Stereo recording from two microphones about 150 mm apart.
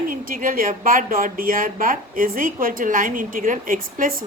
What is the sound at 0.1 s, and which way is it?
A woman's voice, 70° right (ahead or behind).